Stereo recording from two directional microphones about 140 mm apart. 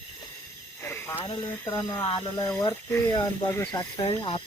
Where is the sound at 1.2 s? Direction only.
30° left (ahead or behind).